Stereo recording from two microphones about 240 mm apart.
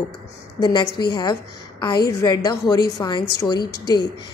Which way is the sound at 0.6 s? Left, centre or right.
Centre.